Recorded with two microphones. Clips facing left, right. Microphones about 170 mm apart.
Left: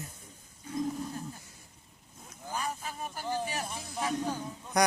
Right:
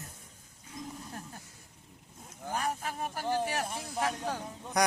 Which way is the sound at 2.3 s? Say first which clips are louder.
Right 2 dB; 65° right (ahead or behind).